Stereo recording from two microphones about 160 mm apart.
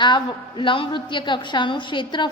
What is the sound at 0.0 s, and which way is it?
A woman's voice, 30° left (ahead or behind).